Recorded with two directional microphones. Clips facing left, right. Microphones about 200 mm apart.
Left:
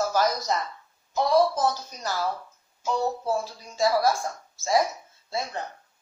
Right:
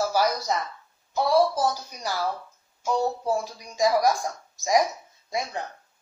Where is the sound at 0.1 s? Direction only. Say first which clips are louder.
Even; 10° right (ahead or behind).